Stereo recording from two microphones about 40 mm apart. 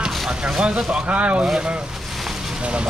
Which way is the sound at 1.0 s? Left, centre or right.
Right.